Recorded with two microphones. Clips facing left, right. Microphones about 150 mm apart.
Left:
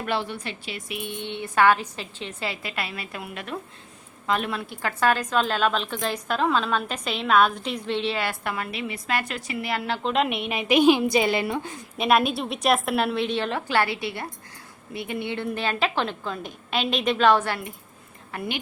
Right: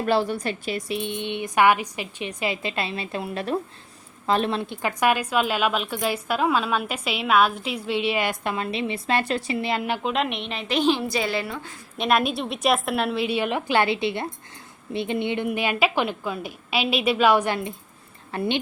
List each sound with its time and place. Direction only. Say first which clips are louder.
0.0 s a woman's voice: right 6 dB; 35° right (ahead or behind); by 10.1 s 15° right (ahead or behind)
10.1 s a woman's voice: left 2 dB; centre (ahead or behind); by 11.7 s 20° left (ahead or behind)
11.9 s a woman's voice: left 1 dB; centre (ahead or behind); by 18.6 s 30° right (ahead or behind)